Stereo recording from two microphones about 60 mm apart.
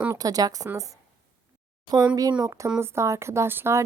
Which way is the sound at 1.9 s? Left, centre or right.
Right.